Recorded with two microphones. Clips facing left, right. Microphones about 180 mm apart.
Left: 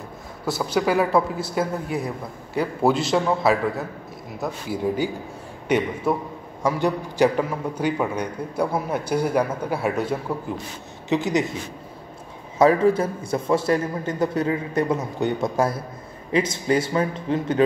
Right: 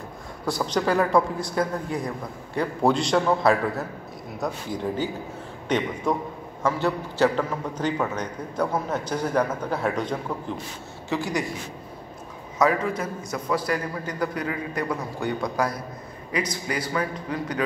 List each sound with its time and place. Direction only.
0.5 s a woman's voice: 5° left (ahead or behind)
11.1 s a man's voice: 20° left (ahead or behind)
12.5 s a man's voice: 30° left (ahead or behind)